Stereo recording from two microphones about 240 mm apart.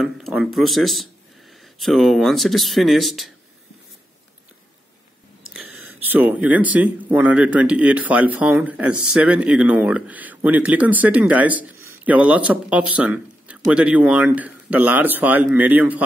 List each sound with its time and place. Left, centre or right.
0.0 s speech: centre
5.5 s speech: centre